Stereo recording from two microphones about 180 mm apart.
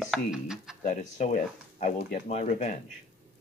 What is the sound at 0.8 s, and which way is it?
Speech, 40° left (ahead or behind).